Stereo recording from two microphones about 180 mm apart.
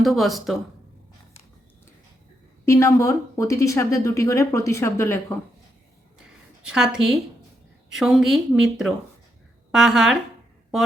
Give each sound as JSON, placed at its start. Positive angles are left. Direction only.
{"t": 0.0, "sound": "a woman's voice", "side_deg": 0}
{"t": 2.6, "sound": "speech", "side_deg": 15}
{"t": 6.1, "sound": "a sound", "side_deg": -5}
{"t": 7.9, "sound": "a woman's voice", "side_deg": 0}